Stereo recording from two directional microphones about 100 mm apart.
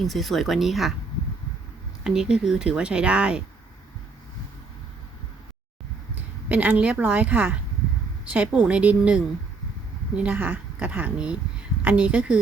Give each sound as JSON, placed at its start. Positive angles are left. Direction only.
{"t": 0.0, "sound": "speech", "side_deg": 0}
{"t": 2.0, "sound": "speech", "side_deg": -5}
{"t": 6.1, "sound": "speech", "side_deg": -15}